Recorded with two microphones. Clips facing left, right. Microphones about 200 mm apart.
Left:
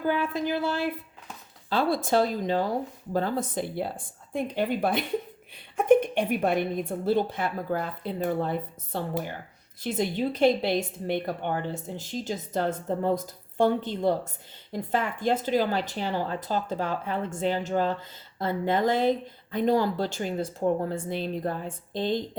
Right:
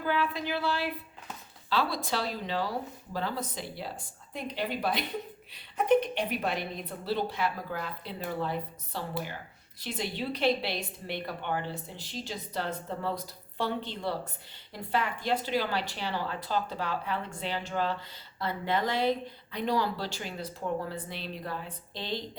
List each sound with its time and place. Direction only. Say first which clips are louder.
0.0 s a woman's voice: left 4 dB; 45° left (ahead or behind)